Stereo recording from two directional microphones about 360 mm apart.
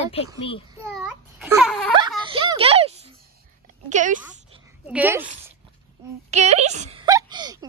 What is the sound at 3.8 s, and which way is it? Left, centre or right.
Speech, right.